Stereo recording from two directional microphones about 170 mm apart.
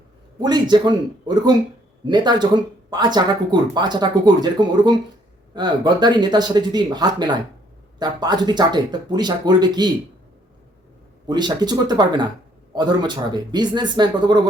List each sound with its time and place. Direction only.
0.3 s speech: 25° right (ahead or behind)
11.3 s speech: 25° right (ahead or behind)